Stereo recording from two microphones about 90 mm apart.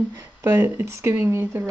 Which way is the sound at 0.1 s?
25° right (ahead or behind).